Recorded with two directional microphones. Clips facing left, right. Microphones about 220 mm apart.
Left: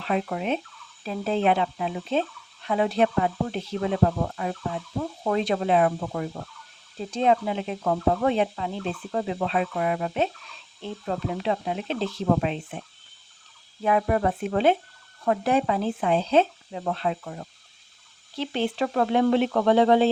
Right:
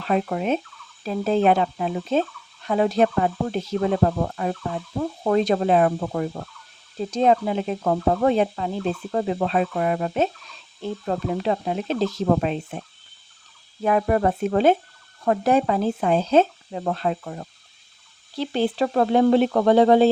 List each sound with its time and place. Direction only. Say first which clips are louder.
0.0 s speech: right 4 dB; 40° right (ahead or behind)
13.8 s speech: right 3 dB; 40° right (ahead or behind)